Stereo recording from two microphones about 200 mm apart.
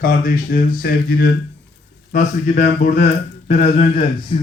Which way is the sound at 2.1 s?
35° left (ahead or behind).